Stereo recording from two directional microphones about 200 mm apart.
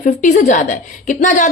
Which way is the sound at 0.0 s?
40° left (ahead or behind).